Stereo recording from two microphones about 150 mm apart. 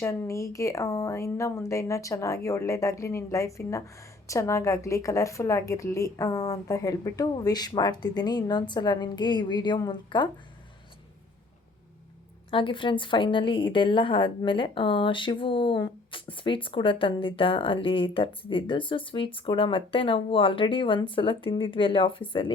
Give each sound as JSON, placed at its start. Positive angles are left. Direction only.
{"t": 0.0, "sound": "a woman's voice", "side_deg": 20}
{"t": 12.5, "sound": "a woman's voice", "side_deg": 35}